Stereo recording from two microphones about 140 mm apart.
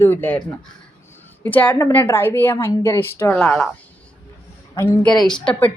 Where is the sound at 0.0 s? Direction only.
15° left (ahead or behind).